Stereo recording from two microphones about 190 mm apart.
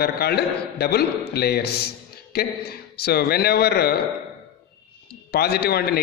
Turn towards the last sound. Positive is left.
turn(degrees=55)  # may be behind; listen again after turning